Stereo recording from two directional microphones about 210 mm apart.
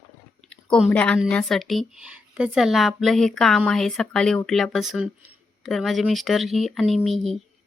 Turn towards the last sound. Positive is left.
turn(degrees=0)  # may be behind; listen again after turning